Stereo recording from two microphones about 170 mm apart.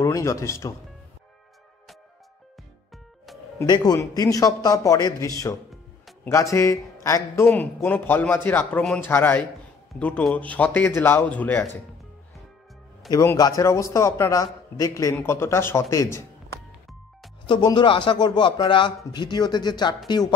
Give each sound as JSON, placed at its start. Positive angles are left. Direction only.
{"t": 0.0, "sound": "a man's voice", "side_deg": 20}
{"t": 3.5, "sound": "speech", "side_deg": 25}
{"t": 7.4, "sound": "a man's voice", "side_deg": 5}
{"t": 13.1, "sound": "a man's voice", "side_deg": 20}
{"t": 17.5, "sound": "speech", "side_deg": 25}